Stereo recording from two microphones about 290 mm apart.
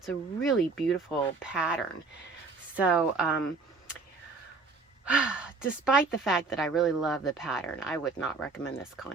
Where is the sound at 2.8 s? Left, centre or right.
Centre.